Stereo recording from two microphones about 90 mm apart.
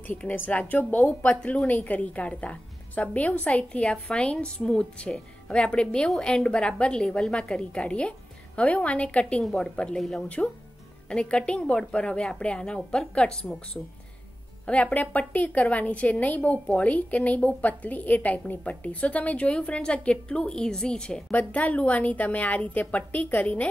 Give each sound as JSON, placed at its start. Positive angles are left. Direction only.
{"t": 0.0, "sound": "a woman's voice", "side_deg": 20}
{"t": 14.7, "sound": "a woman's voice", "side_deg": 15}